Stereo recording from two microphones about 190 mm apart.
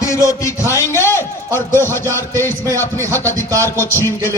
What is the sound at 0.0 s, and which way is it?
A man's voice, 15° left (ahead or behind).